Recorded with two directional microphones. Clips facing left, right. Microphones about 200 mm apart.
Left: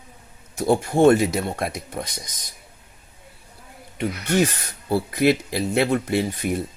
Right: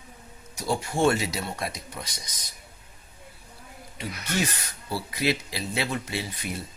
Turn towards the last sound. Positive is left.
turn(degrees=55)  # may be behind; listen again after turning